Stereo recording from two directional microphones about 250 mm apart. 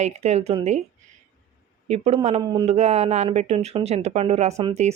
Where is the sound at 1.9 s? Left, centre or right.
Right.